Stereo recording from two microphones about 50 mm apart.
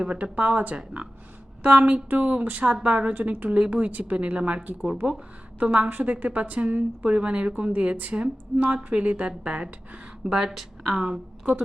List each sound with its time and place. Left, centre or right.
0.0 s a woman's voice: right
5.0 s speech: centre
5.5 s a woman's voice: right
10.5 s speech: centre